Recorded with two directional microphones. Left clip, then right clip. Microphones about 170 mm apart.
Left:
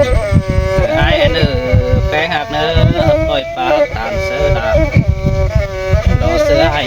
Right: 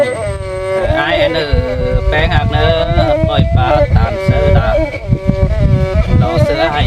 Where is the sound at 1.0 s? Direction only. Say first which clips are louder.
Even; 20° right (ahead or behind).